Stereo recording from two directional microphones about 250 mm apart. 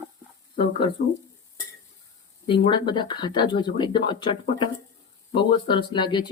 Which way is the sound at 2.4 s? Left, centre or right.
Centre.